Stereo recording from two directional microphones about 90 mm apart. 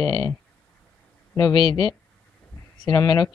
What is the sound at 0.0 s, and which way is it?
Speech, 45° left (ahead or behind).